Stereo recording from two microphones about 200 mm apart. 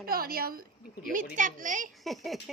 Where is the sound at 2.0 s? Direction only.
Centre (ahead or behind).